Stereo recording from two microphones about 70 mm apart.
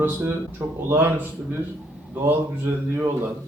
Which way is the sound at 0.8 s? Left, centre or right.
Right.